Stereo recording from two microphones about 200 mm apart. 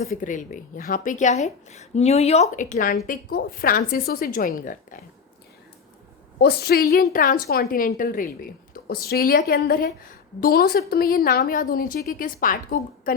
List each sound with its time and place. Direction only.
0.0 s a woman's voice: 45° left (ahead or behind)
6.4 s a woman's voice: 50° left (ahead or behind)